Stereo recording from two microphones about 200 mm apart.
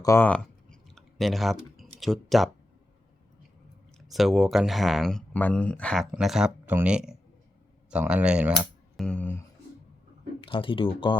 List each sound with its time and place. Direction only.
0.0 s clicking: 10° left (ahead or behind)
4.1 s speech: centre (ahead or behind)
9.0 s speech: 5° left (ahead or behind)
10.4 s speech: 25° left (ahead or behind)